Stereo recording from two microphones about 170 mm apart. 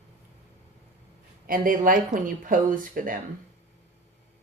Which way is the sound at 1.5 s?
55° right (ahead or behind).